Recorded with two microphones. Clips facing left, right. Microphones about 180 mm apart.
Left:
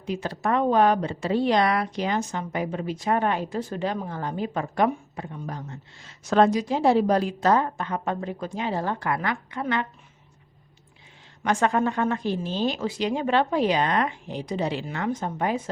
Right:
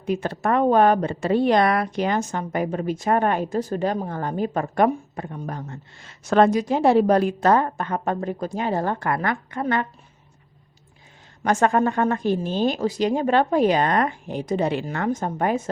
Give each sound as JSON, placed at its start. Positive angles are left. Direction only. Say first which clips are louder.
{"t": 0.0, "sound": "speech", "louder": "right 4 dB", "side_deg": -55}
{"t": 11.4, "sound": "speech", "louder": "right 3 dB", "side_deg": -45}